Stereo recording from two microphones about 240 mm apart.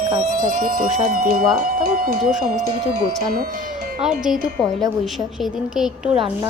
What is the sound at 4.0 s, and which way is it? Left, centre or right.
A woman's voice, centre.